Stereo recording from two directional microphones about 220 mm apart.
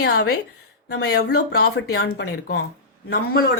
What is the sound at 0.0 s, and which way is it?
Speech, 45° left (ahead or behind).